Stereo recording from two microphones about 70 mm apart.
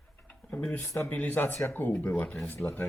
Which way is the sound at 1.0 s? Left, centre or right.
Left.